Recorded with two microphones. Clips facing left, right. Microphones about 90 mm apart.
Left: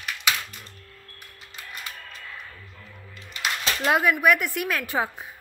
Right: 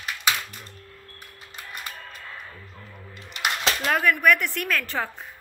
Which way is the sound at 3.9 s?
10° left (ahead or behind).